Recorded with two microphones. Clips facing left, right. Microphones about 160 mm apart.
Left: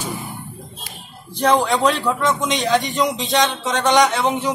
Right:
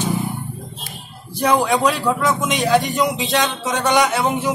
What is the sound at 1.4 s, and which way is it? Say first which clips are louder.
Speech: even; 10° right (ahead or behind).